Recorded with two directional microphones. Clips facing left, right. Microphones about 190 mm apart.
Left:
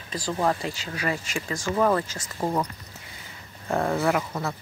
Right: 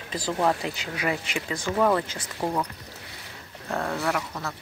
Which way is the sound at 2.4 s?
5° left (ahead or behind).